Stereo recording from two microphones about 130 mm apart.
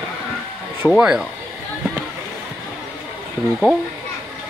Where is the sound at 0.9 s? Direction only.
5° right (ahead or behind).